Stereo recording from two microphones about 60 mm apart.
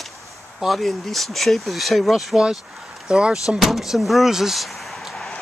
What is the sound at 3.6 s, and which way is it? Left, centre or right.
Speech, centre.